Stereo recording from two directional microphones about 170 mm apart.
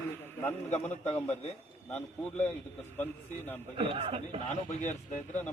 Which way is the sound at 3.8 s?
35° right (ahead or behind).